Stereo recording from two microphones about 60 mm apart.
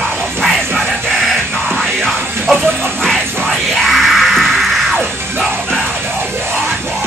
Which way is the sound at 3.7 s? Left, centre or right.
Centre.